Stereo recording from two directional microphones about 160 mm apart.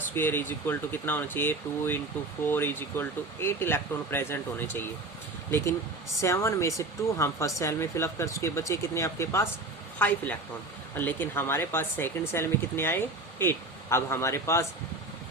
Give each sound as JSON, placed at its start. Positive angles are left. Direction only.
{"t": 0.1, "sound": "speech", "side_deg": 15}
{"t": 10.9, "sound": "speech", "side_deg": 10}